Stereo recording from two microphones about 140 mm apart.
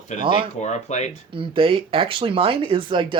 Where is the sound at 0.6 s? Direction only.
55° left (ahead or behind).